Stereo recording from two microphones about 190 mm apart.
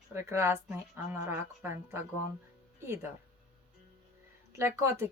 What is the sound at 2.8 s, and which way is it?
Speech, 15° right (ahead or behind).